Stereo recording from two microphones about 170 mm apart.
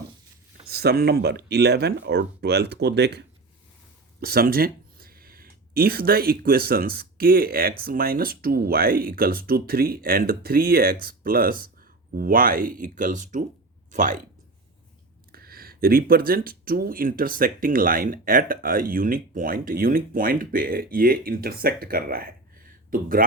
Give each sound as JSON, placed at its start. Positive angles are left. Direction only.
{"t": 0.7, "sound": "speech", "side_deg": -70}
{"t": 4.2, "sound": "speech", "side_deg": -60}
{"t": 15.3, "sound": "speech", "side_deg": -60}